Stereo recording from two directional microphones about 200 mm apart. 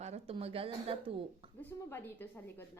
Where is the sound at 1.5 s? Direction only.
10° left (ahead or behind).